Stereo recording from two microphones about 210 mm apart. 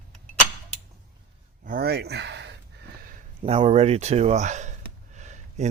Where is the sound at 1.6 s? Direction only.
45° right (ahead or behind).